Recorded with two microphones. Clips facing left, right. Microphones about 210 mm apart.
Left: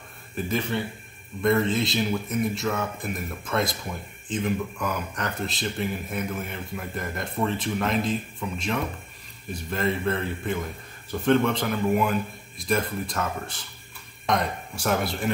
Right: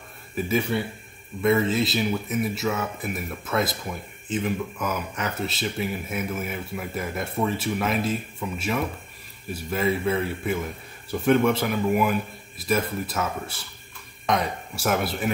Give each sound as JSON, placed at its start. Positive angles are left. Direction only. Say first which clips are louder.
{"t": 0.4, "sound": "speech", "louder": "right 3 dB", "side_deg": -10}